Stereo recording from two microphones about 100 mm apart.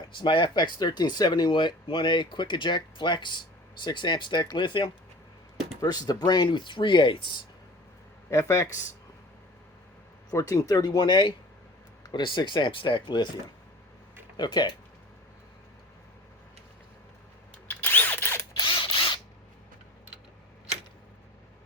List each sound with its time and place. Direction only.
0.1 s speech: 55° left (ahead or behind)
5.8 s speech: 40° left (ahead or behind)
8.3 s speech: 30° left (ahead or behind)
10.3 s speech: 35° left (ahead or behind); by 13.2 s 50° left (ahead or behind)
14.3 s speech: 45° left (ahead or behind)
17.7 s drill: 20° left (ahead or behind)
18.5 s mechanisms: 55° left (ahead or behind)